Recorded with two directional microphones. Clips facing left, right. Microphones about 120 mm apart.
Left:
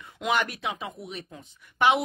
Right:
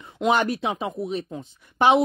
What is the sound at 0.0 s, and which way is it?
Speech, 30° right (ahead or behind).